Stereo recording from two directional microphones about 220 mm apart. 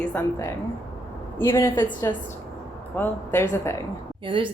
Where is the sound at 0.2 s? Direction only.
10° left (ahead or behind).